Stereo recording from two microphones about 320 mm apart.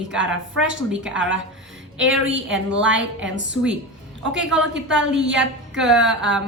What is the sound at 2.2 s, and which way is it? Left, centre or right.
A woman's voice, right.